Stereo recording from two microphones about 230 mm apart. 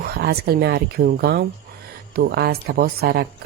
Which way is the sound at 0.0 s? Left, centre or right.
Right.